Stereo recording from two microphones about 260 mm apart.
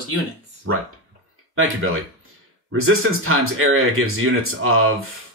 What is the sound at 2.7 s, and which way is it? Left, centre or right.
Speech, right.